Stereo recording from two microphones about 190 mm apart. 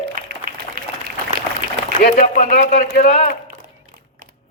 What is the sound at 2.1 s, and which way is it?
A man's voice, 45° left (ahead or behind).